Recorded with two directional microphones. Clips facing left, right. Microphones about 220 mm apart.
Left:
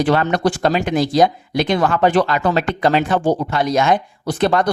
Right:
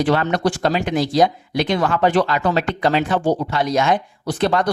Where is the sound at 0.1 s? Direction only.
50° left (ahead or behind).